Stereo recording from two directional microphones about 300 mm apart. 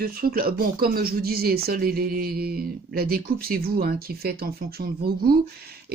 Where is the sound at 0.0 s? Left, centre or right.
Right.